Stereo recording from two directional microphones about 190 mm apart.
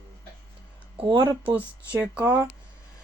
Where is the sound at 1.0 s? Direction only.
25° right (ahead or behind).